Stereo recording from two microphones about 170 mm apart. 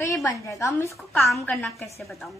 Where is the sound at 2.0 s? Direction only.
Centre (ahead or behind).